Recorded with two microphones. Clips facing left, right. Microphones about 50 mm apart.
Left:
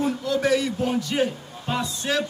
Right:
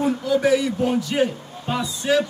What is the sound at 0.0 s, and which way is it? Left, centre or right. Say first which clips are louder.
A man's voice: right 4 dB; centre.